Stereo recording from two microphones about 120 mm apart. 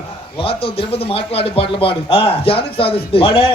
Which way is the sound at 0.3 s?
50° left (ahead or behind).